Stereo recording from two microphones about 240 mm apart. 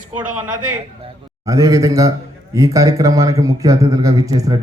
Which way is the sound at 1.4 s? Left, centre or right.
Centre.